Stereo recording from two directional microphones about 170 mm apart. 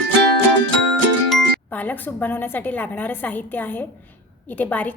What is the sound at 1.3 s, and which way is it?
A woman's voice, 10° left (ahead or behind).